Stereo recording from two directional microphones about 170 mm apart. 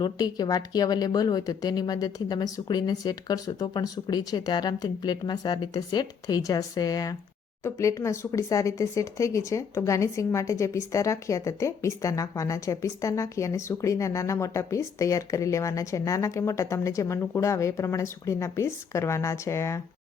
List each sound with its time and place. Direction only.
0.0 s a woman's voice: 25° left (ahead or behind)